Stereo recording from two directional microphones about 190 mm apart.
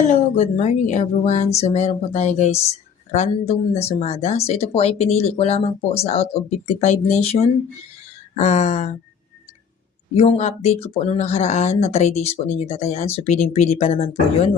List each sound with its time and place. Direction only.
0.1 s speech: 40° left (ahead or behind)
10.2 s speech: 35° left (ahead or behind)